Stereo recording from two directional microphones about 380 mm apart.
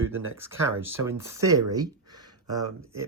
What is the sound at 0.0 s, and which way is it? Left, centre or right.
Speech, centre.